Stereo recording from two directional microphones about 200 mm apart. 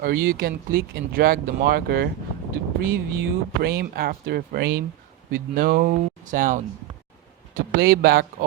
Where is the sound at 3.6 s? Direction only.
50° right (ahead or behind).